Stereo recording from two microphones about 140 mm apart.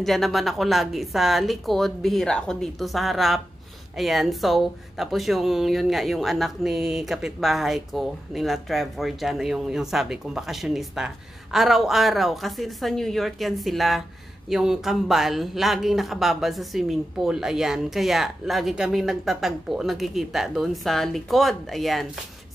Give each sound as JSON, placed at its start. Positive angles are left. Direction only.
{"t": 0.0, "sound": "speech", "side_deg": 0}